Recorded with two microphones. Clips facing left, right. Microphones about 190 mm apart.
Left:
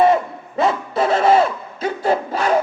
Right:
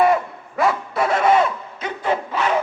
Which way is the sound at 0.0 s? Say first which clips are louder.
Left 2 dB; 25° left (ahead or behind).